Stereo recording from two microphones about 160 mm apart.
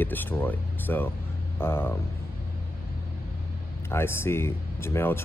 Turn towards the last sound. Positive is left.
turn(degrees=15)  # may be behind; listen again after turning